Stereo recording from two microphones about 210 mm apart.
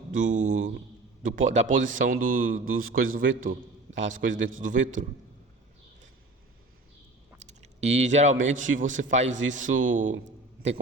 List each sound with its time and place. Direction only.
0.1 s a man's voice: 40° right (ahead or behind)
7.6 s a man's voice: 30° right (ahead or behind)